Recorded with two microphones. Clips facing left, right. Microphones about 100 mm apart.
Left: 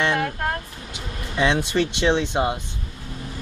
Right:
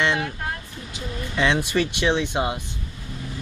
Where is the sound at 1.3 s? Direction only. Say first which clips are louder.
Left 1 dB; 15° left (ahead or behind).